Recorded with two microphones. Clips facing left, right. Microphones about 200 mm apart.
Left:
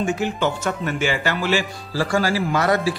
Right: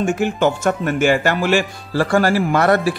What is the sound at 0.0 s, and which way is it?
Speech, 50° right (ahead or behind).